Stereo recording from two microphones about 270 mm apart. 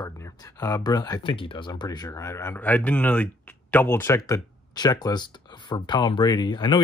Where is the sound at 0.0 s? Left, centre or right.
Centre.